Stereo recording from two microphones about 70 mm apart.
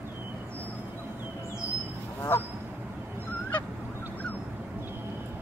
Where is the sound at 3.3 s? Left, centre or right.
Left.